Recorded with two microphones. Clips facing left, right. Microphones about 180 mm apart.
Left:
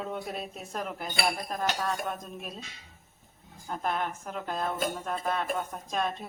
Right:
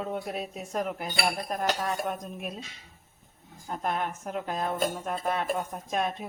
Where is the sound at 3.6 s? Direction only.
5° right (ahead or behind).